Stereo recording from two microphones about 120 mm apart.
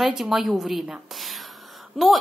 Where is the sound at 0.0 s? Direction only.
Centre (ahead or behind).